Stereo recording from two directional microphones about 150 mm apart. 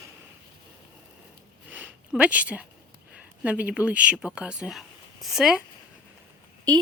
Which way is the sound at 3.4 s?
10° right (ahead or behind).